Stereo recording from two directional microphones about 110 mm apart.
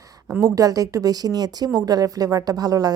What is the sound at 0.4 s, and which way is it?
A woman's voice, 30° right (ahead or behind).